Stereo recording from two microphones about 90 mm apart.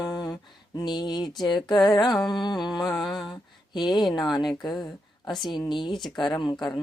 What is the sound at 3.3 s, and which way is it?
Speech, 55° left (ahead or behind).